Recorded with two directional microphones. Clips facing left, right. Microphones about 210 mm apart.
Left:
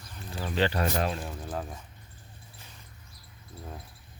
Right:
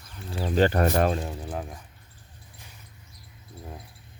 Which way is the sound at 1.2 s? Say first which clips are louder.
Right 2 dB; 15° right (ahead or behind).